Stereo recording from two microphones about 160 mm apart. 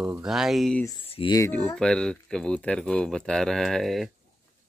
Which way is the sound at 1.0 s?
35° left (ahead or behind).